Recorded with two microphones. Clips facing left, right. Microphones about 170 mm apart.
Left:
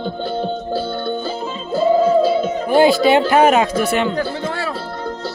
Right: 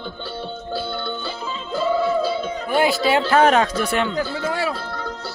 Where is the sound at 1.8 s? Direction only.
40° left (ahead or behind).